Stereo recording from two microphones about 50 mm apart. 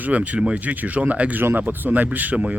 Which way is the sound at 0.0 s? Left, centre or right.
Right.